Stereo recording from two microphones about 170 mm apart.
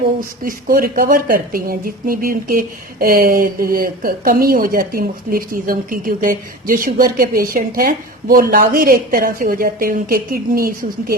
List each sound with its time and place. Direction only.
0.4 s speech: 55° right (ahead or behind)